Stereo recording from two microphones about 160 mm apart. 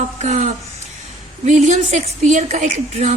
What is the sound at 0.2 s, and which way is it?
Speech, 45° right (ahead or behind).